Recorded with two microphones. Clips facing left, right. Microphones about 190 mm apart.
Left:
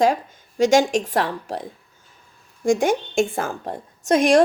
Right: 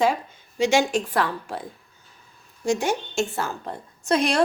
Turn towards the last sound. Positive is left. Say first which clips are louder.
# left 6 dB
turn(degrees=45)  # may be behind; listen again after turning